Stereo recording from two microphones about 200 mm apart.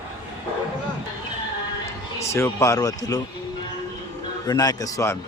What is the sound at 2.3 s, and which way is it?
Speech, 15° left (ahead or behind).